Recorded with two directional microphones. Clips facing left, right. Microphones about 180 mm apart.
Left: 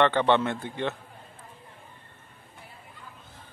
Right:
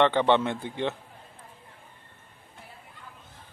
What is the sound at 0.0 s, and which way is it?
Speech, 15° right (ahead or behind).